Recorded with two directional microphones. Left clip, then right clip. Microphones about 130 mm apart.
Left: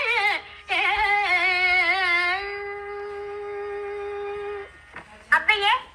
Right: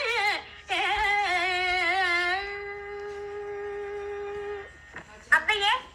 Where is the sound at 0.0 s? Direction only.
35° left (ahead or behind).